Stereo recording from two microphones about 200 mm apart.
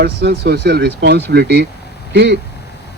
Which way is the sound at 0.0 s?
55° right (ahead or behind).